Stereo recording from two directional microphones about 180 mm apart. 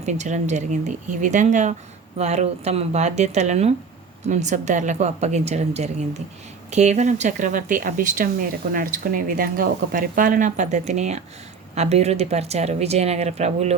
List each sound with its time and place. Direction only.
0.0 s speech: 40° right (ahead or behind)